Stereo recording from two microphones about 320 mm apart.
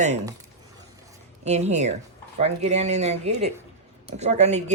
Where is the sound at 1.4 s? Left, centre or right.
Right.